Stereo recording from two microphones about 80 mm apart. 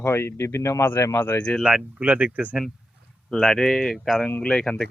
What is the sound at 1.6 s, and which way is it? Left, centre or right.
Speech, centre.